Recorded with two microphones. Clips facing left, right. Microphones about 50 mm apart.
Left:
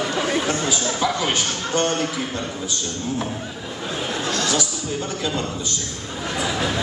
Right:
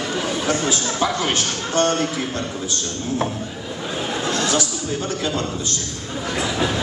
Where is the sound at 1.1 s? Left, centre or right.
Centre.